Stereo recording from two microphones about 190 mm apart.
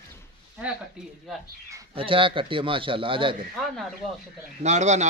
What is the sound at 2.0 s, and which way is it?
A man's voice, 25° right (ahead or behind).